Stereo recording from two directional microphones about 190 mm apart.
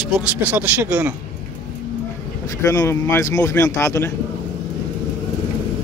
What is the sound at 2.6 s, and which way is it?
A man's voice, 15° left (ahead or behind).